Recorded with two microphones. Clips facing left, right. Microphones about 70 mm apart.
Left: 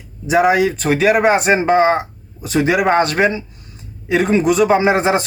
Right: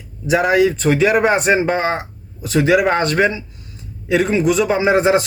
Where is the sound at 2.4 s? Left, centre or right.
Left.